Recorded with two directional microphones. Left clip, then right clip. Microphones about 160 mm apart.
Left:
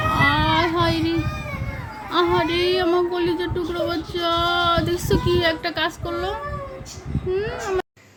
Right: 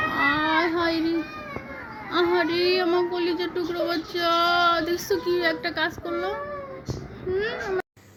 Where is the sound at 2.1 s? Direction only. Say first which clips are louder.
Left 3 dB; 20° left (ahead or behind).